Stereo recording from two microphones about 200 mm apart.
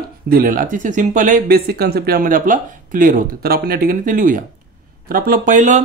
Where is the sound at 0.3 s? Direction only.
45° right (ahead or behind).